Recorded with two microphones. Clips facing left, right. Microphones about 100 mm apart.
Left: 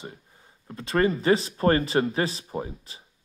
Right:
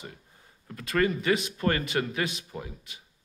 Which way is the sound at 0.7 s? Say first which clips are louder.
Left 3 dB; 30° left (ahead or behind).